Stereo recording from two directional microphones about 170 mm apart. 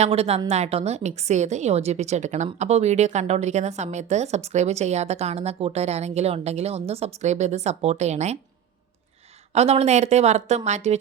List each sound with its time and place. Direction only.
0.0 s a woman's voice: 35° right (ahead or behind)
9.5 s a woman's voice: 40° right (ahead or behind)